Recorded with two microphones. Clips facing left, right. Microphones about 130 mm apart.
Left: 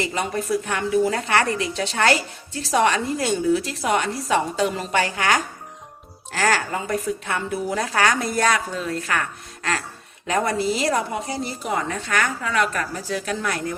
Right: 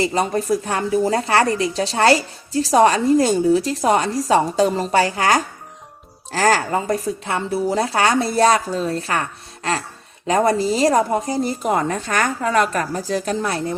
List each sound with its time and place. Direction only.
0.0 s a woman's voice: 35° right (ahead or behind)
10.2 s a woman's voice: 35° right (ahead or behind)